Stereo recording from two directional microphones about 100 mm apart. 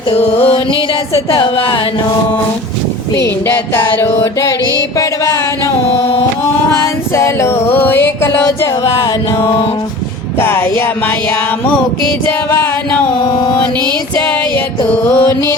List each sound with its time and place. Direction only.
0.1 s music: 70° left (ahead or behind)
1.3 s a woman's voice: 60° left (ahead or behind)
3.2 s music: 25° left (ahead or behind)
4.9 s a sound: 35° left (ahead or behind)
6.7 s music: 25° left (ahead or behind)
8.8 s music: 40° left (ahead or behind)
10.3 s music: 20° left (ahead or behind)
12.5 s music: 25° left (ahead or behind)
15.0 s music: 25° left (ahead or behind)